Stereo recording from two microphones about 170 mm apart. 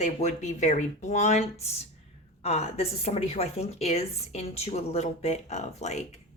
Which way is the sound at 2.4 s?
40° left (ahead or behind).